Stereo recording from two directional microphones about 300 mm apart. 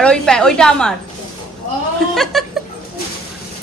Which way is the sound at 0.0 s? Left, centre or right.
Centre.